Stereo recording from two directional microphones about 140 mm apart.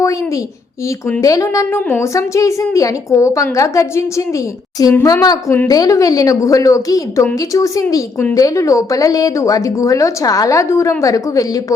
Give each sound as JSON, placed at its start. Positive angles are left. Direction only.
{"t": 1.2, "sound": "a woman's voice", "side_deg": 25}